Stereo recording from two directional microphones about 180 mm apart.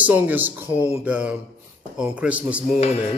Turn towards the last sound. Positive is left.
turn(degrees=35)  # may be behind; listen again after turning